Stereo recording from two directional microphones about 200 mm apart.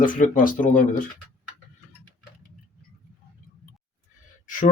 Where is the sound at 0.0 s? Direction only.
40° left (ahead or behind).